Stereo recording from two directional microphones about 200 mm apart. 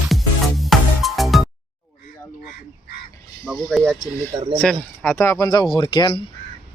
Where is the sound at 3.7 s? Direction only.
Centre (ahead or behind); by 6.2 s 25° left (ahead or behind).